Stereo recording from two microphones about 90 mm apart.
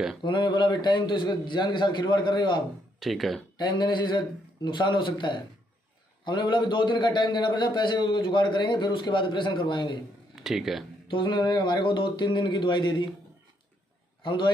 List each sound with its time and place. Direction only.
0.2 s a man's voice: 65° left (ahead or behind)
3.0 s speech: centre (ahead or behind)
3.5 s a man's voice: 60° left (ahead or behind)
10.3 s speech: 5° right (ahead or behind)
11.1 s a man's voice: 60° left (ahead or behind)
14.2 s a man's voice: 65° left (ahead or behind)